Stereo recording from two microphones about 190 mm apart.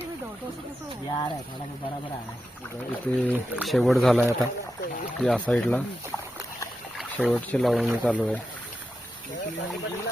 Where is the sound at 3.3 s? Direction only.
5° right (ahead or behind).